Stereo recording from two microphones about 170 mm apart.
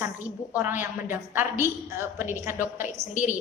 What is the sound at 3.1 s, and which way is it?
Speech, 50° left (ahead or behind).